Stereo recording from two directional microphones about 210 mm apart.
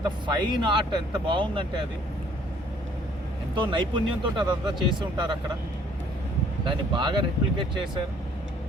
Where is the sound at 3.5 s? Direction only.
20° right (ahead or behind).